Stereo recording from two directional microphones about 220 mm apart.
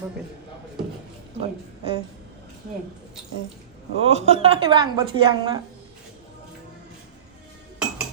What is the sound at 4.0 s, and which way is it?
A woman's voice, 25° right (ahead or behind).